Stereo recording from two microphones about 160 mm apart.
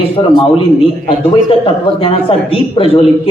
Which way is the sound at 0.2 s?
35° left (ahead or behind).